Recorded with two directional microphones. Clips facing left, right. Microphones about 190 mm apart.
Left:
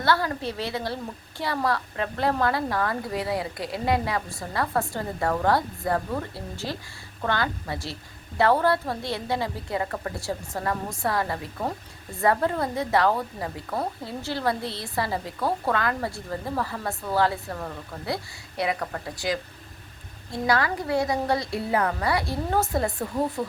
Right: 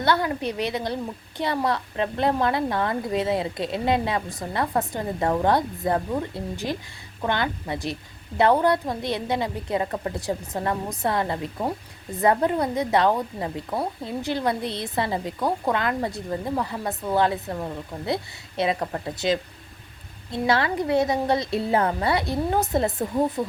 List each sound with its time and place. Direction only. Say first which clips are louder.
0.0 s a woman's voice: right 2 dB; 20° right (ahead or behind)
20.5 s a woman's voice: right 2 dB; 25° right (ahead or behind)